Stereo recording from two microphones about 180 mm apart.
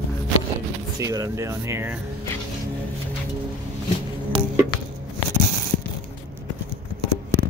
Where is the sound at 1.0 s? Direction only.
20° right (ahead or behind).